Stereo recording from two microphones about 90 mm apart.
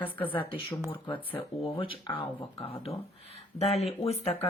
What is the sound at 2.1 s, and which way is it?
Speech, 90° left.